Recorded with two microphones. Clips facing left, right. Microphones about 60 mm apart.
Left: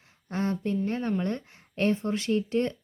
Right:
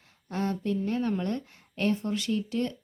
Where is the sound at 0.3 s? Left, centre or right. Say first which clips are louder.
Left 1 dB; left.